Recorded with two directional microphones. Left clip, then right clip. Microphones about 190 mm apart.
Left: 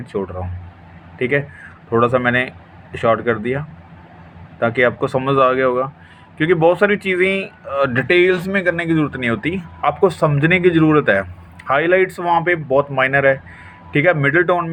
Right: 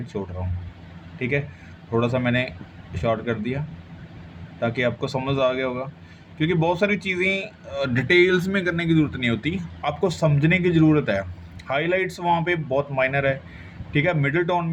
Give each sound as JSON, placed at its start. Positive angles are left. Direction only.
{"t": 1.2, "sound": "speech", "side_deg": 15}
{"t": 4.6, "sound": "speech", "side_deg": 20}